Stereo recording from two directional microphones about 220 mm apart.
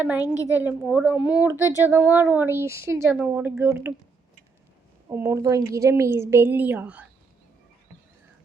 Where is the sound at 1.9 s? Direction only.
10° right (ahead or behind).